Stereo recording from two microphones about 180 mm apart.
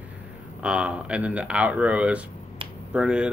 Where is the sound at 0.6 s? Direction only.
5° right (ahead or behind).